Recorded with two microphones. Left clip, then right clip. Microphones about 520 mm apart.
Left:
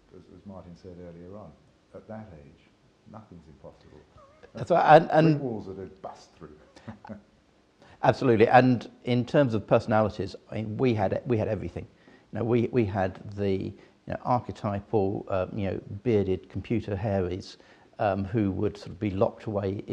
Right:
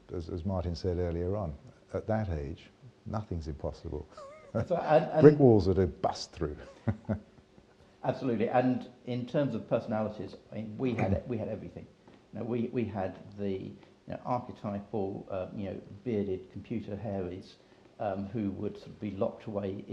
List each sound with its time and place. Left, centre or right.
0.1 s a sound: right
0.5 s speech: right
3.5 s speech: right
4.6 s speech: left
5.6 s speech: right
8.0 s speech: left